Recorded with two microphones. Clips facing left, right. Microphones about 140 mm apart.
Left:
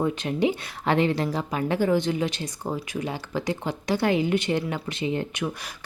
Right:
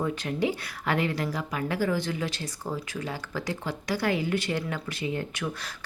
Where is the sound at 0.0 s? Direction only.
20° left (ahead or behind).